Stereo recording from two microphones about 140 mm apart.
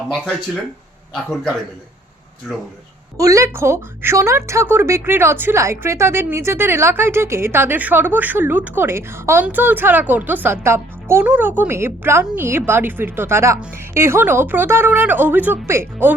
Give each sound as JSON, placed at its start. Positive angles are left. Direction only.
{"t": 1.1, "sound": "a man's voice", "side_deg": 0}
{"t": 3.2, "sound": "a woman's voice", "side_deg": -25}